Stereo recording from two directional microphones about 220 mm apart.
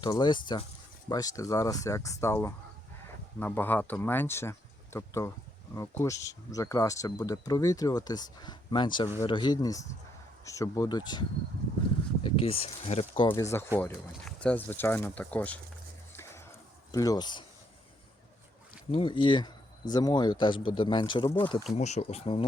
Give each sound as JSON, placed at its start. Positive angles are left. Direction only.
{"t": 0.0, "sound": "speech", "side_deg": 20}
{"t": 16.1, "sound": "music", "side_deg": 10}
{"t": 16.9, "sound": "speech", "side_deg": 15}
{"t": 18.9, "sound": "speech", "side_deg": 25}
{"t": 21.8, "sound": "speech", "side_deg": 30}